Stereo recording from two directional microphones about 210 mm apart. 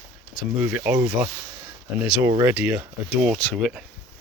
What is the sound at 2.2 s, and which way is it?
Speech, 20° right (ahead or behind).